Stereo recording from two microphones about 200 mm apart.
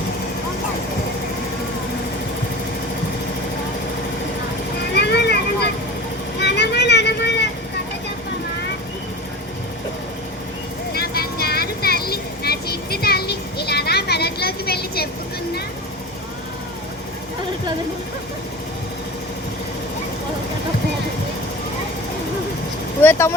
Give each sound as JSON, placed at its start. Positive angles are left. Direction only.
{"t": 4.9, "sound": "vehicle", "side_deg": 55}
{"t": 10.9, "sound": "vehicle", "side_deg": 50}
{"t": 23.0, "sound": "vehicle", "side_deg": 10}